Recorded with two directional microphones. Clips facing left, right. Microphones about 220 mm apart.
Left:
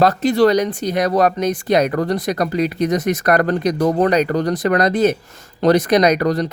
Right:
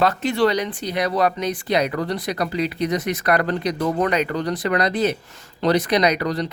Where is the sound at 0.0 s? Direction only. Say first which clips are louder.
Left 5 dB; 40° left (ahead or behind).